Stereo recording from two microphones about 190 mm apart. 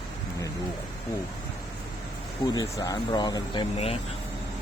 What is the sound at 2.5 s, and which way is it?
Speech, 20° left (ahead or behind).